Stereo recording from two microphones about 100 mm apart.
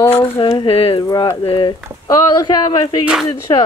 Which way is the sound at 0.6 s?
70° left (ahead or behind).